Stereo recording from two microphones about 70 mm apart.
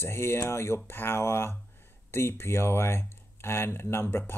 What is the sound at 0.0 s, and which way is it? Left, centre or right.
Speech, left.